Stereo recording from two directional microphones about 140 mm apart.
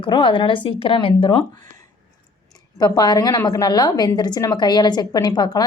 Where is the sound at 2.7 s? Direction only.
30° left (ahead or behind).